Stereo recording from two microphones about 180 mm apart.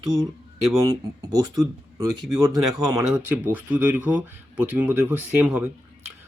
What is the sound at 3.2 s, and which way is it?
Speech, 10° right (ahead or behind).